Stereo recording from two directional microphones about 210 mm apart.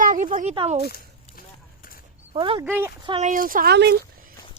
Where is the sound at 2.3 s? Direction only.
25° right (ahead or behind).